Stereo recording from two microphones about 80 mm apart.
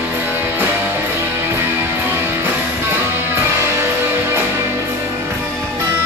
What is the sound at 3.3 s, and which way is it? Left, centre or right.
Music, right.